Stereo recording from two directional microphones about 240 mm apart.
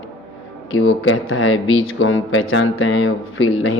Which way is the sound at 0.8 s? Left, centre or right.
Left.